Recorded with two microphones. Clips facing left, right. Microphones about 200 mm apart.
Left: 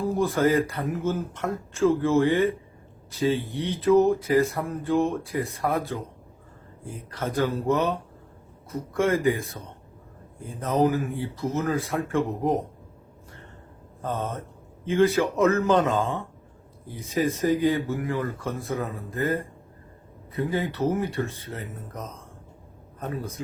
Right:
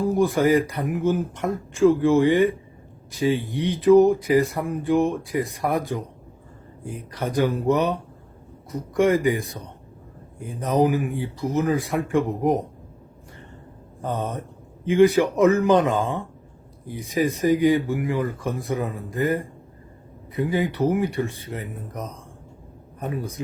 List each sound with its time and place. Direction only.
0.0 s speech: 15° right (ahead or behind)
7.1 s speech: 15° right (ahead or behind)
14.0 s speech: 15° right (ahead or behind)